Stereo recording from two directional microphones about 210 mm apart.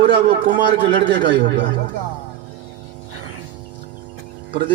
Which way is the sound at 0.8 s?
25° right (ahead or behind).